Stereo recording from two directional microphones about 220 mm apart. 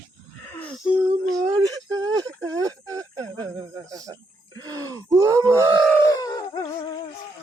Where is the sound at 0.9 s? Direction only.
15° right (ahead or behind).